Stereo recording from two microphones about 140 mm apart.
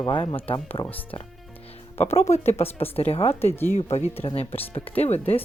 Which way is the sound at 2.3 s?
50° left (ahead or behind).